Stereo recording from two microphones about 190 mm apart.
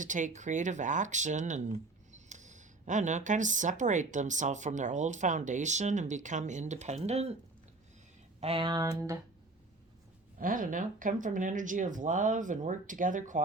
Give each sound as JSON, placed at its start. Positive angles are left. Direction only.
{"t": 0.0, "sound": "speech", "side_deg": -40}
{"t": 8.4, "sound": "speech", "side_deg": -30}
{"t": 10.3, "sound": "speech", "side_deg": -45}